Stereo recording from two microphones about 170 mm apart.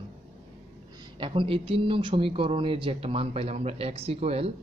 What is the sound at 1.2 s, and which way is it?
Speech, 30° right (ahead or behind).